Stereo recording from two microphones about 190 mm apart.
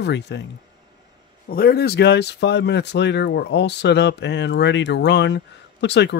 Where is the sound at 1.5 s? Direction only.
50° left (ahead or behind).